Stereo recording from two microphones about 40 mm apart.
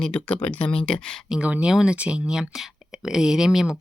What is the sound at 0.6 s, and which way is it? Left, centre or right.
Speech, left.